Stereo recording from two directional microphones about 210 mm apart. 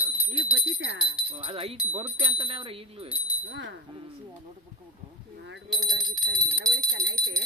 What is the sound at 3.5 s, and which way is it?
Speech, 60° right (ahead or behind).